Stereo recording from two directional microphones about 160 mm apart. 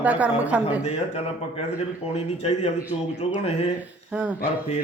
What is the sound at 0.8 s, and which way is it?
A man's voice, 40° left (ahead or behind).